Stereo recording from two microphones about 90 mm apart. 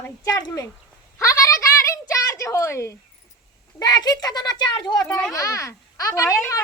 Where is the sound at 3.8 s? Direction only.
45° left (ahead or behind).